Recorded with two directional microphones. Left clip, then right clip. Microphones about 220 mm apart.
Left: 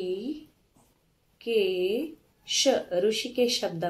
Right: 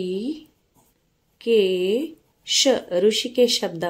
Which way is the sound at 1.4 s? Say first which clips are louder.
Right 7 dB; 50° right (ahead or behind).